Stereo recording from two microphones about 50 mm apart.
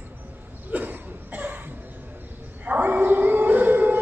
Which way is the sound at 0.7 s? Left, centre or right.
Right.